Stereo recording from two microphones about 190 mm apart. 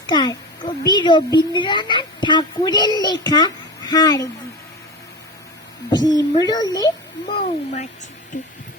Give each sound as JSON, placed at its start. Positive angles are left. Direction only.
{"t": 0.1, "sound": "a woman's voice", "side_deg": 20}
{"t": 5.9, "sound": "a woman's voice", "side_deg": 20}